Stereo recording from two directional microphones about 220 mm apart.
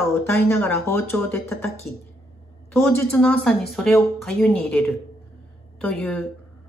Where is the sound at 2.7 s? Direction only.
5° left (ahead or behind).